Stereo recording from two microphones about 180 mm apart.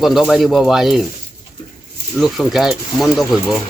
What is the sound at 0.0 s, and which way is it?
Speech, centre (ahead or behind).